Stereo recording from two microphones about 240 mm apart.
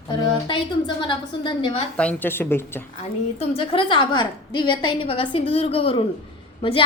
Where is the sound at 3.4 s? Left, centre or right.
Left.